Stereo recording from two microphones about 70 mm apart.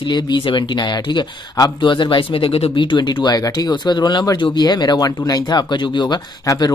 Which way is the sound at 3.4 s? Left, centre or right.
Left.